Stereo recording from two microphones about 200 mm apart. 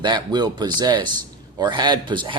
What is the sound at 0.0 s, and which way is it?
Speech, 20° right (ahead or behind).